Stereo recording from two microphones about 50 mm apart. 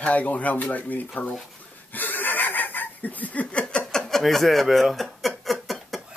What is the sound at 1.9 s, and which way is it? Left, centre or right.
Laughter, left.